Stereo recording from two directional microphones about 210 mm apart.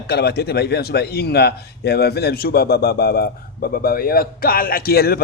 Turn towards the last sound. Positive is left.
turn(degrees=45)  # may be behind; listen again after turning